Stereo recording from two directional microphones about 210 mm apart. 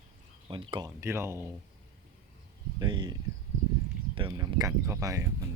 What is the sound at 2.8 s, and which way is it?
Speech, 20° right (ahead or behind).